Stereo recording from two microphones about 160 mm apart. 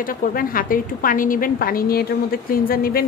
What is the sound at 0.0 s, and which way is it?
A woman's voice, 60° left (ahead or behind).